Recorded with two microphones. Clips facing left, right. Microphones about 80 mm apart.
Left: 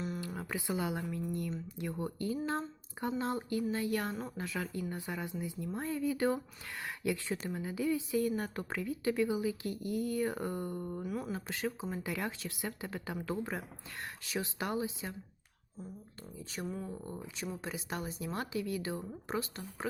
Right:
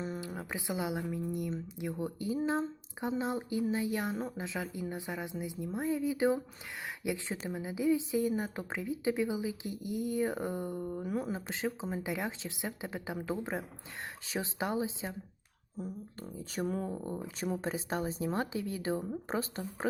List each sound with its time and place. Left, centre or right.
0.2 s speech: centre
11.0 s speech: right
11.3 s speech: right
16.2 s speech: right
16.9 s speech: right
17.2 s speech: right